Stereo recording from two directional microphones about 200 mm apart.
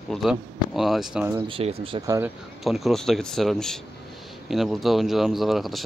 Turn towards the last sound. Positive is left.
turn(degrees=0)  # may be behind; listen again after turning